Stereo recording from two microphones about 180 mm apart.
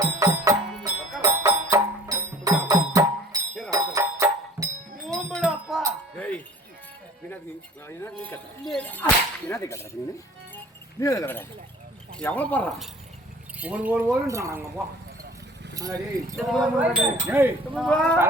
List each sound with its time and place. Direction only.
0.0 s music: 20° right (ahead or behind)
5.3 s a sound: centre (ahead or behind)
7.9 s speech: 15° left (ahead or behind)
11.0 s speech: 15° left (ahead or behind)
13.6 s speech: 10° right (ahead or behind)
15.7 s speech: 20° right (ahead or behind)
16.5 s speech: 5° right (ahead or behind)
17.8 s speech: 5° left (ahead or behind)